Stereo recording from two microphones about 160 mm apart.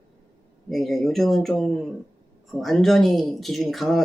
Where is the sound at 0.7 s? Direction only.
Centre (ahead or behind).